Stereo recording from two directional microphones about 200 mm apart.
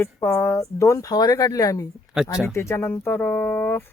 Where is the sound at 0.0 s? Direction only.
15° left (ahead or behind).